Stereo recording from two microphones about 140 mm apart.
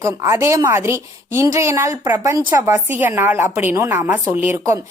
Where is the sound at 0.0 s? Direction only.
20° right (ahead or behind).